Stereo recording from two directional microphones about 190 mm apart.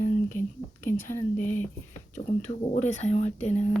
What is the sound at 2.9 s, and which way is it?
Speech, 35° left (ahead or behind).